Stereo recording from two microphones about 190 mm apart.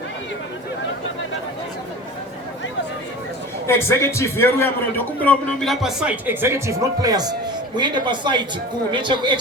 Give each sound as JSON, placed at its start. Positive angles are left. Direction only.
{"t": 3.7, "sound": "a man's voice", "side_deg": 15}